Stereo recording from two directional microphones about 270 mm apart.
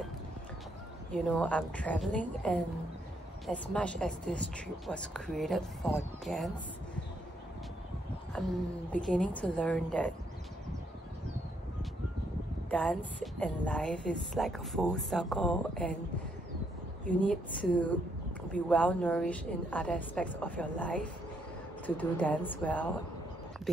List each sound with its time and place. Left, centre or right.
1.1 s a woman's voice: centre
8.4 s a woman's voice: centre
12.6 s a woman's voice: centre
17.2 s a woman's voice: centre